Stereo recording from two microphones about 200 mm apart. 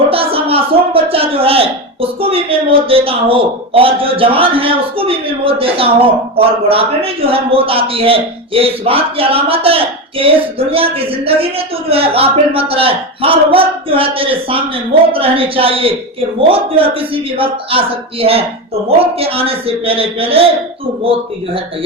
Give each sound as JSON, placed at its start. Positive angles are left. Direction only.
{"t": 0.1, "sound": "a woman's voice", "side_deg": -30}